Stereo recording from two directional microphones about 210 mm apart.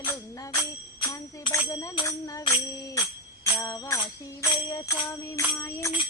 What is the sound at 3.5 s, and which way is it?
Music, 15° left (ahead or behind).